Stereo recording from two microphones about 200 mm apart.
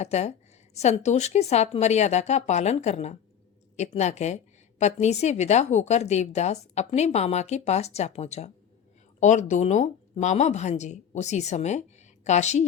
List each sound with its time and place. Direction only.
0.0 s a woman's voice: 35° left (ahead or behind)